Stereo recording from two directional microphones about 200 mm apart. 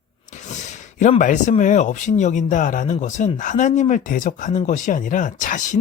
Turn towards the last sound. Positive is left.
turn(degrees=40)  # may be behind; listen again after turning